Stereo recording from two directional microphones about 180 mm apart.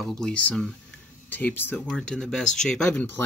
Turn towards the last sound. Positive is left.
turn(degrees=10)  # may be behind; listen again after turning